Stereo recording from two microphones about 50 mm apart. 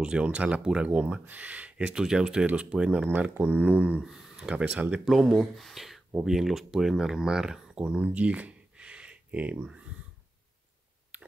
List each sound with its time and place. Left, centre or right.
0.0 s speech: right
2.0 s speech: centre
4.0 s a sound: centre
4.5 s speech: centre
5.0 s speech: centre; by 9.7 s right
9.7 s a sound: right